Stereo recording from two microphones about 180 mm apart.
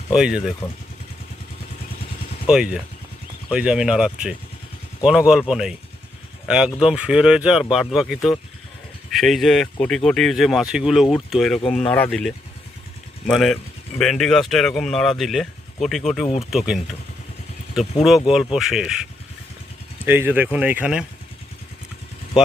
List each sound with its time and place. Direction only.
0.1 s speech: 5° right (ahead or behind)
2.5 s speech: 5° right (ahead or behind)
6.7 s speech: 5° right (ahead or behind)
11.6 s speech: 30° left (ahead or behind)
11.9 s speech: 10° left (ahead or behind)
18.0 s speech: centre (ahead or behind)
20.1 s speech: 10° right (ahead or behind)